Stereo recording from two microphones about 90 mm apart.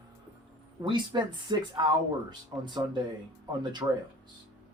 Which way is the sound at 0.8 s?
60° right (ahead or behind).